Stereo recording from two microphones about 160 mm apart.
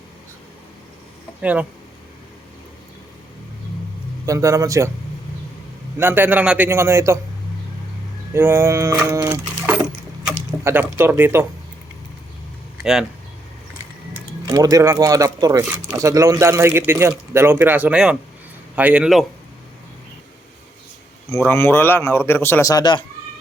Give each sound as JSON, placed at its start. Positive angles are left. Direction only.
{"t": 1.4, "sound": "speech", "side_deg": -10}
{"t": 4.3, "sound": "speech", "side_deg": -20}
{"t": 6.0, "sound": "speech", "side_deg": -15}
{"t": 8.3, "sound": "speech", "side_deg": -15}
{"t": 10.6, "sound": "speech", "side_deg": -15}
{"t": 12.8, "sound": "speech", "side_deg": -5}
{"t": 14.4, "sound": "speech", "side_deg": -25}
{"t": 21.2, "sound": "a man's voice", "side_deg": 15}